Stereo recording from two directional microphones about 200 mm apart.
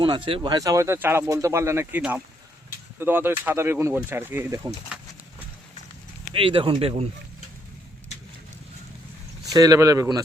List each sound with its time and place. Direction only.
0.3 s speech: 25° right (ahead or behind)
6.3 s speech: 25° right (ahead or behind)
9.5 s speech: 15° right (ahead or behind)